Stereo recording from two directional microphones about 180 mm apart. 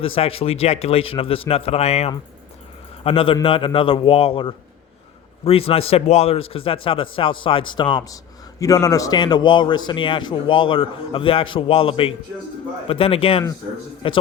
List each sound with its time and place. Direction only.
0.0 s a man's voice: 30° left (ahead or behind)